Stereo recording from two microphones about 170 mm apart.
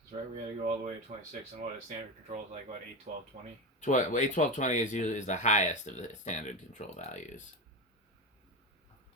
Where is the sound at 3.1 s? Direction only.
45° right (ahead or behind).